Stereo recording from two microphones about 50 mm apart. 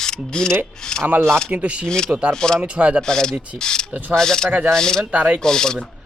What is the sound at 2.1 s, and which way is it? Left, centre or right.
Speech, right.